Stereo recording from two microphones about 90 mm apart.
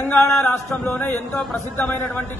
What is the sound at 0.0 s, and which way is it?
Speech, 30° left (ahead or behind).